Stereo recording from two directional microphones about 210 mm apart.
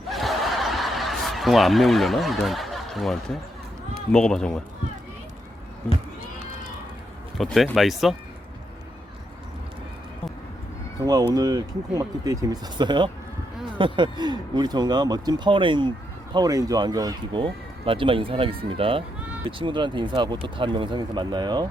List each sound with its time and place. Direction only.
0.1 s snicker: centre (ahead or behind)
4.1 s speech: 5° left (ahead or behind)
7.3 s speech: centre (ahead or behind)
11.0 s speech: 20° right (ahead or behind)